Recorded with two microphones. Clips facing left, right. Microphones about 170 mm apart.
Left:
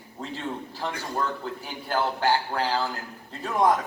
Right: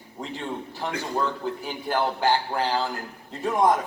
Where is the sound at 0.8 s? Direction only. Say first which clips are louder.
Right 2 dB; 15° right (ahead or behind).